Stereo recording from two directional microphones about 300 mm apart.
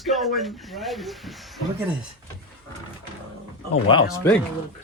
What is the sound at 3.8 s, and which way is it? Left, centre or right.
Speech, centre.